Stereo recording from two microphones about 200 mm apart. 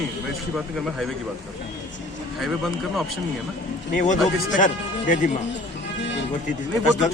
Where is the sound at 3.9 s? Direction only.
40° left (ahead or behind).